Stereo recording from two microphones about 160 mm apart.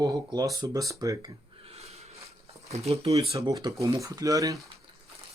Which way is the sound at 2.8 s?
40° right (ahead or behind).